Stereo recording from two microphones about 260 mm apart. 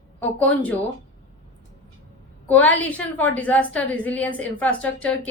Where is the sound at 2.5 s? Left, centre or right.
Centre.